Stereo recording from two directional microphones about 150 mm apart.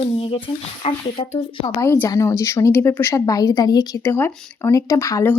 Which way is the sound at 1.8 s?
20° left (ahead or behind).